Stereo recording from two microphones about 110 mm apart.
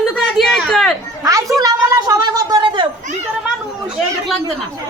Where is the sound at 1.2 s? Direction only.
30° right (ahead or behind).